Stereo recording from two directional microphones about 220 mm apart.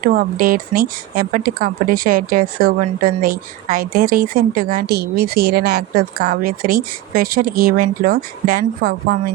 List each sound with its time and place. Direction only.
0.0 s speech: 40° right (ahead or behind)